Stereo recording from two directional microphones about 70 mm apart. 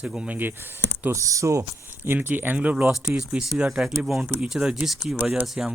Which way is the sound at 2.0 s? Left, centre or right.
Right.